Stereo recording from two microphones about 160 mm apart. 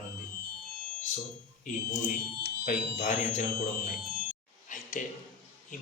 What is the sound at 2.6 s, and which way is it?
Speech, 50° left (ahead or behind).